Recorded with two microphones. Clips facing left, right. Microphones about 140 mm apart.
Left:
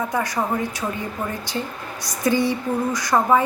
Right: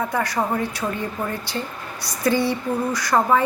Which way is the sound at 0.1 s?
15° left (ahead or behind).